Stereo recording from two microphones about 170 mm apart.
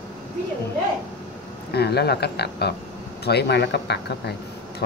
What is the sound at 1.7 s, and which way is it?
Speech, 70° left (ahead or behind).